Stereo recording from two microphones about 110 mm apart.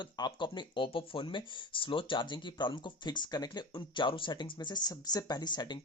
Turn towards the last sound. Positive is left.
turn(degrees=40)  # may be behind; listen again after turning